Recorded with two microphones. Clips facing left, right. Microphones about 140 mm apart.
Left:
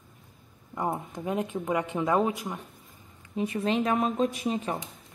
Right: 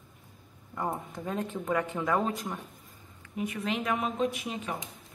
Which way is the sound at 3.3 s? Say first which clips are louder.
Left 5 dB; 30° left (ahead or behind).